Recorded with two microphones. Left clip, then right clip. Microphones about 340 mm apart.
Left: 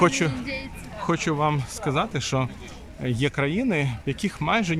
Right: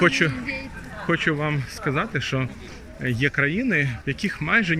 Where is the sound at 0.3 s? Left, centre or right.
Left.